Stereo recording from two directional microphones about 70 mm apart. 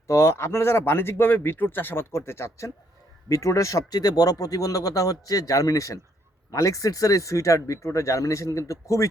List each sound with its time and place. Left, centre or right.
0.1 s speech: left
3.8 s speech: left